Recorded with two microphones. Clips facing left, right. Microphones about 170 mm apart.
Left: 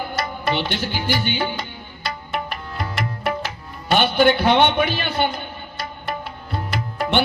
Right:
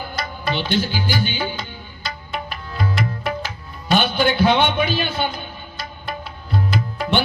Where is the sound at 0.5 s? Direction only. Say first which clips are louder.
Right 5 dB; 60° left (ahead or behind).